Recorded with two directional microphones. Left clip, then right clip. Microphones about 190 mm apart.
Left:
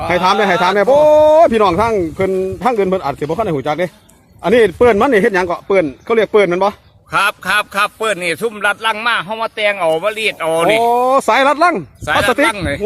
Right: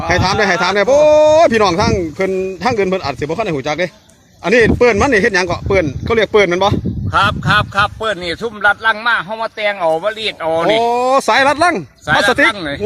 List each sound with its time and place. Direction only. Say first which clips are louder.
0.1 s speech: left 1 dB; 5° left (ahead or behind)
7.1 s speech: right 1 dB; 25° left (ahead or behind)
8.0 s speech: left 2 dB; 35° left (ahead or behind)
10.8 s speech: left 1 dB; centre (ahead or behind)
12.5 s speech: left 2 dB; 40° left (ahead or behind)